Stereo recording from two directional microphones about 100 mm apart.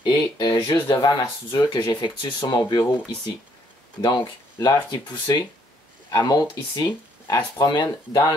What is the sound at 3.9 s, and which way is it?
Speech, 45° left (ahead or behind).